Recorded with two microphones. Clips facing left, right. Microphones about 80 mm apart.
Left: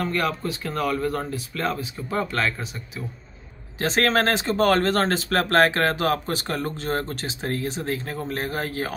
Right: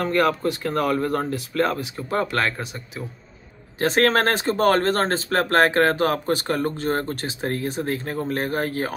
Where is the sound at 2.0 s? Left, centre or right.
Right.